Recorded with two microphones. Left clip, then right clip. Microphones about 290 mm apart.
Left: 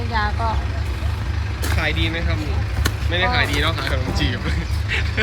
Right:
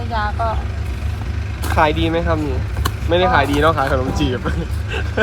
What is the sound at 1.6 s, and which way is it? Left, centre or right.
Speech, centre.